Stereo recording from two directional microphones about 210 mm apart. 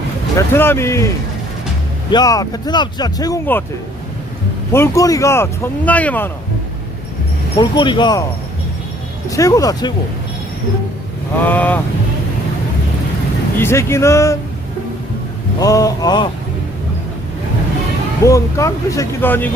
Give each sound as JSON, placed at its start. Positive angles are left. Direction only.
{"t": 0.3, "sound": "speech", "side_deg": 10}
{"t": 4.7, "sound": "speech", "side_deg": 15}
{"t": 7.6, "sound": "speech", "side_deg": 20}
{"t": 9.3, "sound": "speech", "side_deg": 15}
{"t": 11.4, "sound": "speech", "side_deg": 10}
{"t": 13.6, "sound": "speech", "side_deg": 10}
{"t": 15.5, "sound": "speech", "side_deg": 15}
{"t": 18.3, "sound": "speech", "side_deg": 15}